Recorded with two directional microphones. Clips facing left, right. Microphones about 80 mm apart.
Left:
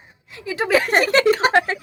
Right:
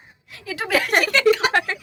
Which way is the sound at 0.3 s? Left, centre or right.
Left.